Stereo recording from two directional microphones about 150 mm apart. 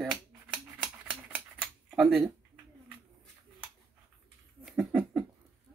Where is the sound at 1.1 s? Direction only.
5° right (ahead or behind).